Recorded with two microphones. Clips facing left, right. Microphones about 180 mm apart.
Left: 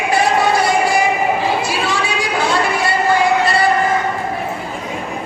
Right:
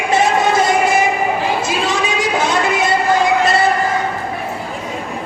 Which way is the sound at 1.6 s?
20° right (ahead or behind).